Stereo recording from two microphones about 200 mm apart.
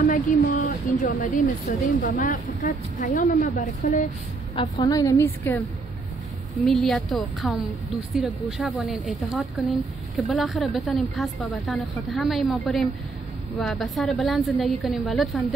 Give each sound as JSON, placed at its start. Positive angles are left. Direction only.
{"t": 0.0, "sound": "speech", "side_deg": 40}
{"t": 4.6, "sound": "a woman's voice", "side_deg": 20}